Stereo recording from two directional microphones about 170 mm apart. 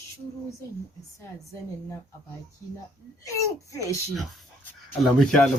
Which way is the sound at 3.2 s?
20° left (ahead or behind).